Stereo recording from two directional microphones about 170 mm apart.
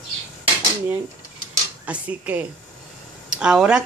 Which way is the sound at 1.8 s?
10° right (ahead or behind).